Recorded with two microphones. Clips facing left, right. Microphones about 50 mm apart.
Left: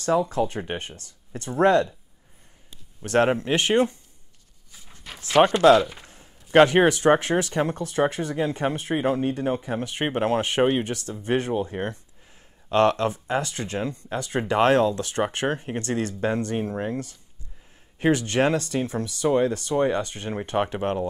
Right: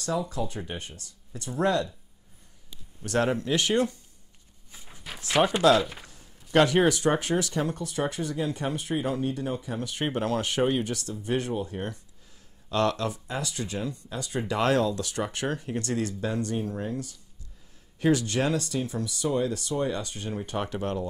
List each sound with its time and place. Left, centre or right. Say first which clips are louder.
0.0 s speech: left 7 dB; left
3.0 s speech: left 5 dB; left
4.7 s a sound: right 1 dB; centre
5.4 s speech: left 5 dB; centre
6.0 s speech: left 2 dB; left